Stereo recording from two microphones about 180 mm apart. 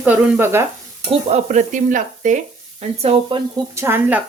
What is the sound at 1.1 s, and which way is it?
Stir, 40° right (ahead or behind).